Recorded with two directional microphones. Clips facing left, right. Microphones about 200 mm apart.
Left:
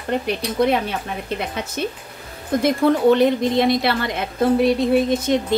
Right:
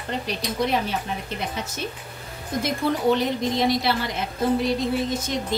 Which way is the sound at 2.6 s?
60° left (ahead or behind).